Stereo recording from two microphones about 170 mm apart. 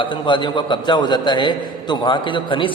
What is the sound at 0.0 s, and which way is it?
A man's voice, 30° left (ahead or behind).